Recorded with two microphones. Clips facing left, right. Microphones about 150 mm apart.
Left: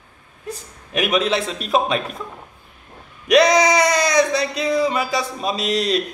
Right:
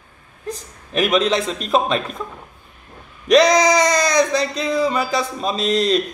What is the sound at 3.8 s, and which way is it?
A man's voice, 10° left (ahead or behind).